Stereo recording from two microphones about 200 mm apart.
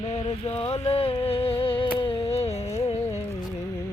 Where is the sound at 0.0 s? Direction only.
30° left (ahead or behind).